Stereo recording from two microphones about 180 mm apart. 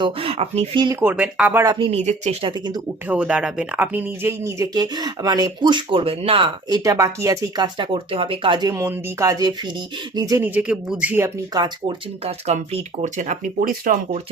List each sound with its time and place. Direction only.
0.0 s speech: 30° right (ahead or behind)
0.9 s speech: 10° right (ahead or behind)
1.6 s speech: 25° right (ahead or behind)
1.9 s speech: 40° right (ahead or behind)
3.1 s speech: 5° right (ahead or behind)
12.2 s speech: 35° right (ahead or behind)